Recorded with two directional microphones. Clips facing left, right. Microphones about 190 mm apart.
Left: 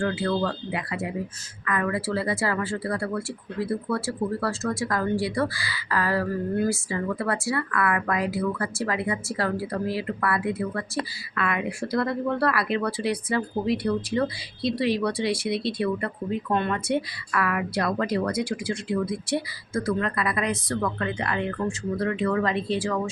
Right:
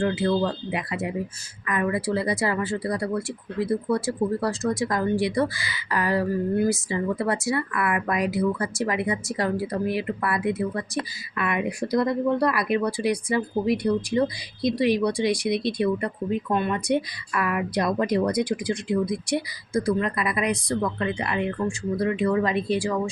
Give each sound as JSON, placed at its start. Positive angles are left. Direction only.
{"t": 0.0, "sound": "speech", "side_deg": -20}